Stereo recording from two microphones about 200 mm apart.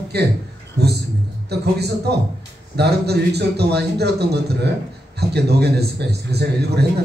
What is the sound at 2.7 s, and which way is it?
A man's voice, 55° right (ahead or behind).